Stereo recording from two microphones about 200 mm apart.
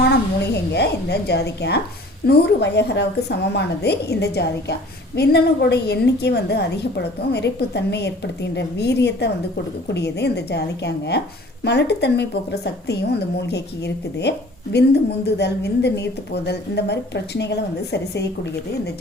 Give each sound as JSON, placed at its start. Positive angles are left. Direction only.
{"t": 0.0, "sound": "a woman's voice", "side_deg": 55}